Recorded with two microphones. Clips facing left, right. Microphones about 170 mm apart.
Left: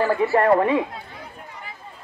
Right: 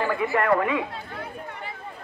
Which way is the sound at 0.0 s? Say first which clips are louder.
Left 5 dB; 35° left (ahead or behind).